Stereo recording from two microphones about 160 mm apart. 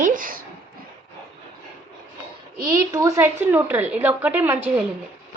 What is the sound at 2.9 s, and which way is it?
A woman's voice, 20° right (ahead or behind).